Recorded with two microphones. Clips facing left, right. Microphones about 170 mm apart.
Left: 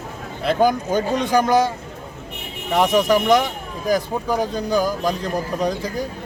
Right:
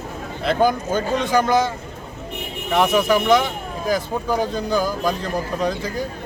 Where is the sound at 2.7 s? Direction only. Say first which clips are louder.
Left 1 dB; 15° left (ahead or behind).